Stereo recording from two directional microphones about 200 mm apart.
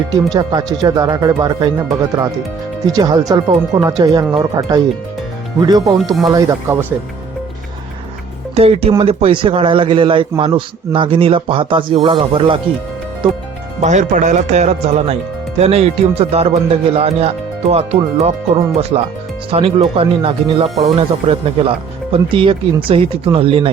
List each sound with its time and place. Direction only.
0.1 s a man's voice: 20° right (ahead or behind)
2.8 s a man's voice: 20° right (ahead or behind)
8.5 s a man's voice: 30° right (ahead or behind)
13.8 s a man's voice: 35° right (ahead or behind)